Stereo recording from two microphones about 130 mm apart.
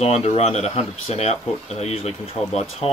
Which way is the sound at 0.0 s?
50° left (ahead or behind).